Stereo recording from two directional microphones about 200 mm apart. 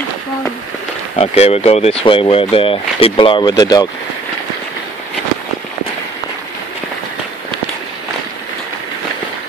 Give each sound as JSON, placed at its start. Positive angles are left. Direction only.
{"t": 1.1, "sound": "speech", "side_deg": 30}